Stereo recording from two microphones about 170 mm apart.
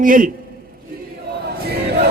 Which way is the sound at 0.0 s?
55° right (ahead or behind).